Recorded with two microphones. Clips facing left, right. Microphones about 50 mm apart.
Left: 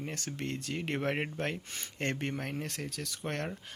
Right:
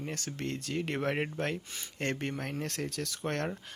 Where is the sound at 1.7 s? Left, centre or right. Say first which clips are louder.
Right 1 dB; left.